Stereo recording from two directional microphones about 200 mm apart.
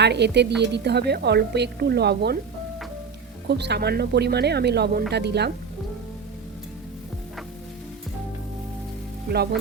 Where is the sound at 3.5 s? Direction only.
55° right (ahead or behind).